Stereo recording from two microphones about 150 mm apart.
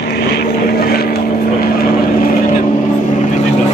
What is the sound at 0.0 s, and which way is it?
Vehicle, 90° left.